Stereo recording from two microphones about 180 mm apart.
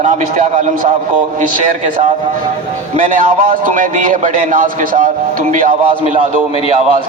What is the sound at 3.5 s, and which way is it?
A man's voice, 50° right (ahead or behind).